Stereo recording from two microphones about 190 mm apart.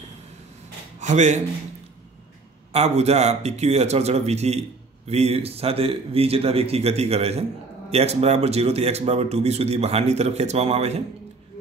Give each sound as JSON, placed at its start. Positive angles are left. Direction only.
{"t": 1.0, "sound": "a man's voice", "side_deg": -40}
{"t": 2.7, "sound": "speech", "side_deg": -35}